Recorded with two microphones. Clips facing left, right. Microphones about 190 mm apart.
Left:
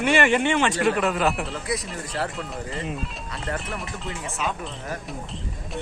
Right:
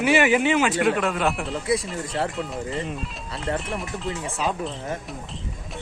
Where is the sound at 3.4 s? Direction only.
30° right (ahead or behind).